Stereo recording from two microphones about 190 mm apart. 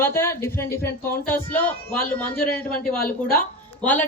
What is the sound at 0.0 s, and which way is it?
A woman's voice, 15° left (ahead or behind).